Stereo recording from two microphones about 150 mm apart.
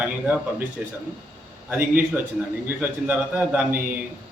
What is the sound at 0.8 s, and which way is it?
Speech, 10° right (ahead or behind).